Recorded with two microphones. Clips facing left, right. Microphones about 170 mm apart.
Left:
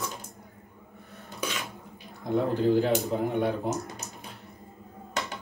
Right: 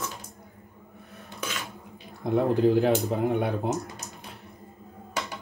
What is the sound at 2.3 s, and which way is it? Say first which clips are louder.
Speech: right 2 dB; 65° right (ahead or behind).